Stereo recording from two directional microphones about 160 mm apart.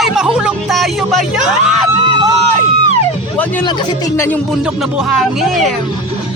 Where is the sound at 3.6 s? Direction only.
25° left (ahead or behind).